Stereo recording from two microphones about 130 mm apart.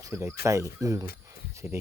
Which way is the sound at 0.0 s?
20° right (ahead or behind).